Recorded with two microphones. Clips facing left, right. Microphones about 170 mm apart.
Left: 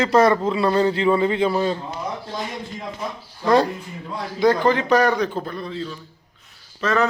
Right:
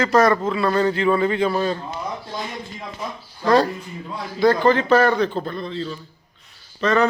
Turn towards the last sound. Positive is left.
turn(degrees=0)  # may be behind; listen again after turning